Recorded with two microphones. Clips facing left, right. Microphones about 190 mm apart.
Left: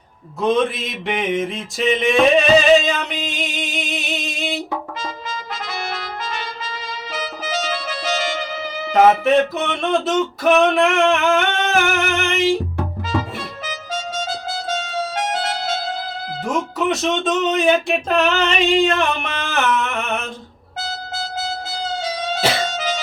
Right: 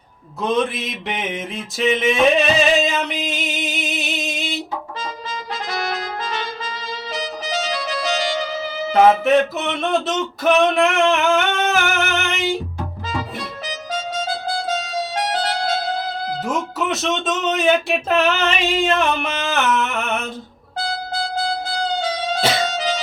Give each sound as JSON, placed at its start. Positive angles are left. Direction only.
{"t": 0.4, "sound": "speech", "side_deg": 0}
{"t": 2.7, "sound": "music", "side_deg": 0}
{"t": 8.9, "sound": "music", "side_deg": 0}
{"t": 14.8, "sound": "music", "side_deg": -35}
{"t": 16.4, "sound": "speech", "side_deg": 0}
{"t": 22.7, "sound": "music", "side_deg": -35}